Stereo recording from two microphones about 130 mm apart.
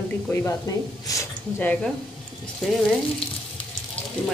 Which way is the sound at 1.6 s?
10° left (ahead or behind).